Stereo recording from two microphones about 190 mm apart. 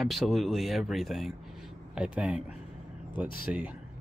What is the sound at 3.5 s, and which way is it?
Speech, 5° right (ahead or behind).